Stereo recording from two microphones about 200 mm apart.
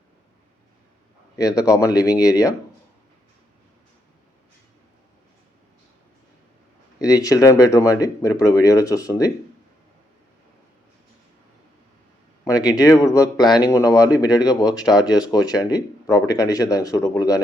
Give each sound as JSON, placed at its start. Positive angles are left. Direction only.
{"t": 1.4, "sound": "speech", "side_deg": 15}
{"t": 7.0, "sound": "speech", "side_deg": 20}
{"t": 12.5, "sound": "speech", "side_deg": 20}